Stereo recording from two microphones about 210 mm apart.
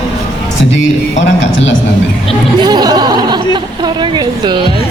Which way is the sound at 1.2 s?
60° left (ahead or behind).